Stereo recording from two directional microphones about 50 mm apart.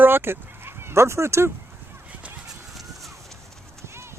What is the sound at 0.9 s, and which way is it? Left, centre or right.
Speech, right.